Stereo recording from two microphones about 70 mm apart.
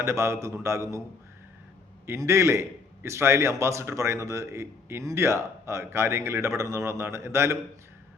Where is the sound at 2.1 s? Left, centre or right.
Right.